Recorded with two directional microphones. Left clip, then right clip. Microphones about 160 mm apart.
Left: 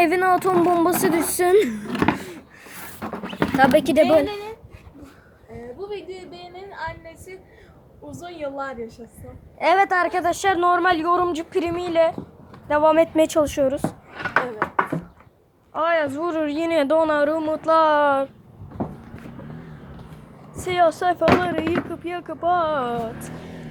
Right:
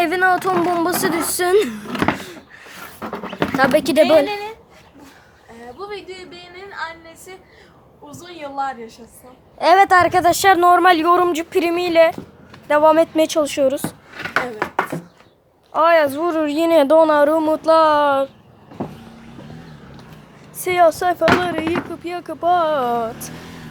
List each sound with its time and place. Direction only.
0.0 s speech: 5° left (ahead or behind)
2.1 s a sound: centre (ahead or behind)
3.8 s speech: 5° right (ahead or behind)
6.3 s a sound: centre (ahead or behind)
8.4 s a woman's voice: 15° right (ahead or behind)
13.1 s speech: centre (ahead or behind)
13.6 s speech: 15° right (ahead or behind)
14.9 s a sound: 25° right (ahead or behind)
15.7 s a woman's voice: 15° right (ahead or behind); by 17.6 s 30° right (ahead or behind)
17.6 s speech: 20° right (ahead or behind)
20.6 s speech: 15° right (ahead or behind)